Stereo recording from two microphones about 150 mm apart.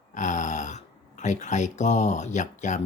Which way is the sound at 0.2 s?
55° left (ahead or behind).